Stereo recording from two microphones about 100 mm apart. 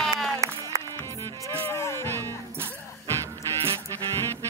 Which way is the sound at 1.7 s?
25° left (ahead or behind).